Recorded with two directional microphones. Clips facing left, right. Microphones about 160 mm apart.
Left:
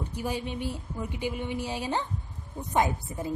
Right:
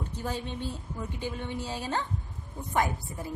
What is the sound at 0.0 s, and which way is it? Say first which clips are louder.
A woman's voice: left 2 dB; 10° left (ahead or behind).